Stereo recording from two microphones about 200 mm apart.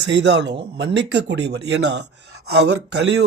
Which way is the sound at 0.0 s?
60° right (ahead or behind).